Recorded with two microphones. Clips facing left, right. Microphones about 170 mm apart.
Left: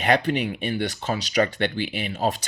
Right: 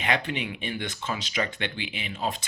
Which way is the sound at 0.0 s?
40° left (ahead or behind).